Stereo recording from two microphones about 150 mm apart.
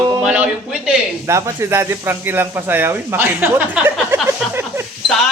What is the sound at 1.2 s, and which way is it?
Speech, 20° right (ahead or behind).